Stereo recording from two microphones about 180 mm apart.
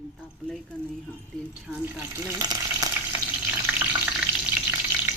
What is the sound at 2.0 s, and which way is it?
Water, 15° right (ahead or behind).